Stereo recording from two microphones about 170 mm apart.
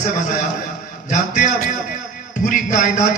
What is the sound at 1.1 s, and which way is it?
Speech, 45° left (ahead or behind).